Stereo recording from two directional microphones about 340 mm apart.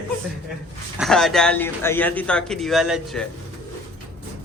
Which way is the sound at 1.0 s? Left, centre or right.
Centre.